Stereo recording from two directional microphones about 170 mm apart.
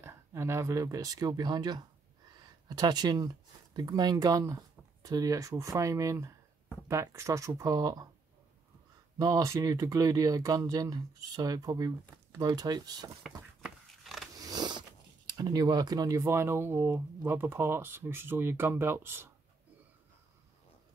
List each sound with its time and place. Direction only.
0.0 s speech: 15° right (ahead or behind)
9.2 s speech: 20° right (ahead or behind)
13.6 s a sound: centre (ahead or behind)
14.3 s speech: 20° right (ahead or behind)